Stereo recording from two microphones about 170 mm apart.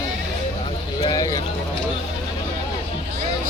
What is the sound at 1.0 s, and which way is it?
Speech, 20° left (ahead or behind).